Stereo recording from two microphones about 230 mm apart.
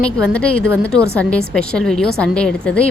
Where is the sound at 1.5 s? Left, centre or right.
Centre.